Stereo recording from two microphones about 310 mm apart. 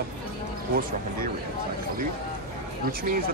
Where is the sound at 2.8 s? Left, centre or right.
Right.